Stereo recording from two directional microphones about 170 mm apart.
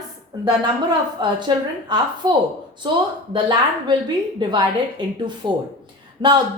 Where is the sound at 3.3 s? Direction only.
25° right (ahead or behind).